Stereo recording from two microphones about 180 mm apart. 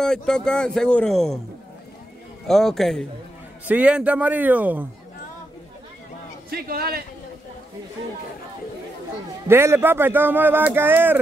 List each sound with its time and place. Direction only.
0.0 s speech: 5° left (ahead or behind)
2.4 s speech: centre (ahead or behind)
6.5 s speech: 55° right (ahead or behind)
9.5 s speech: 15° right (ahead or behind)